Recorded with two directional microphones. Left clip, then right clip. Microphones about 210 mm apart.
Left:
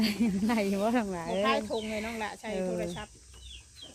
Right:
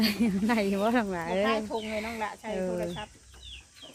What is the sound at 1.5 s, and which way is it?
Speech, 40° left (ahead or behind).